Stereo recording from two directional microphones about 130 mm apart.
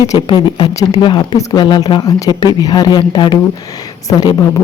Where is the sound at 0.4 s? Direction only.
35° left (ahead or behind).